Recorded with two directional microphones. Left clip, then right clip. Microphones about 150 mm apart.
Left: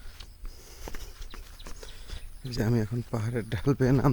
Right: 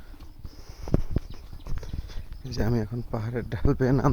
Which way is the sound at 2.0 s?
20° left (ahead or behind).